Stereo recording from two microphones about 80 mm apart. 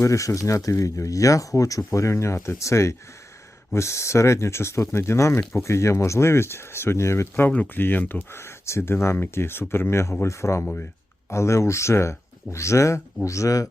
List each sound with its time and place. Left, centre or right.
0.0 s speech: left
10.6 s speech: left
11.3 s speech: left